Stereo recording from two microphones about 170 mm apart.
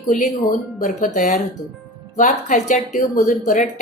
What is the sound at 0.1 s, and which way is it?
Speech, 50° left (ahead or behind).